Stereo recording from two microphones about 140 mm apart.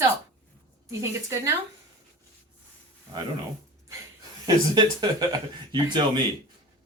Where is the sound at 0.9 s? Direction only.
20° right (ahead or behind).